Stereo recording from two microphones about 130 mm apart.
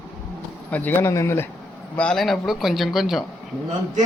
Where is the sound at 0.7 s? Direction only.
15° left (ahead or behind).